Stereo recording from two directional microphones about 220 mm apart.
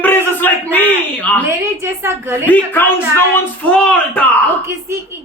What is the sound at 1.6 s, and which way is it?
Speech, 10° right (ahead or behind).